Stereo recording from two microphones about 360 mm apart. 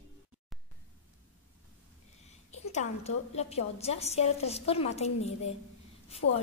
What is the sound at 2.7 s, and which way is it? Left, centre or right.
A woman's voice, centre.